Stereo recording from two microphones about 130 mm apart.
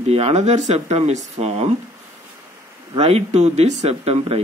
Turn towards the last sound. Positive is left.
turn(degrees=-50)  # may be behind; listen again after turning